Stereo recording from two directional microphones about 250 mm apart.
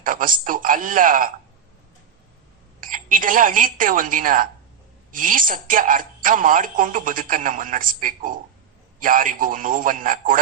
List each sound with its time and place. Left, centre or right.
0.0 s a woman's voice: right
2.8 s a woman's voice: right